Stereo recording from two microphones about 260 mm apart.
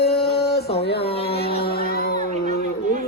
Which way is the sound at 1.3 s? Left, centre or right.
Left.